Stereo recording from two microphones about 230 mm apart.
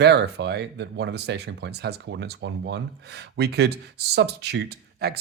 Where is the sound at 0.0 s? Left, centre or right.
Right.